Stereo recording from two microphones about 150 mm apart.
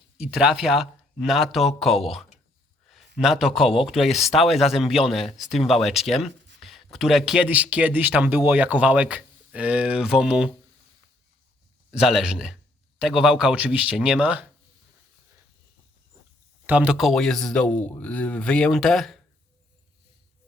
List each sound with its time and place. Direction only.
0.2 s speech: 5° right (ahead or behind)
6.6 s a sound: centre (ahead or behind)
6.9 s speech: centre (ahead or behind)
11.9 s speech: 5° right (ahead or behind)
16.6 s speech: 10° right (ahead or behind)